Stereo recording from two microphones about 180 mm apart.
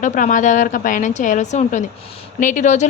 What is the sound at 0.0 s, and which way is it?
A woman's voice, 45° left (ahead or behind).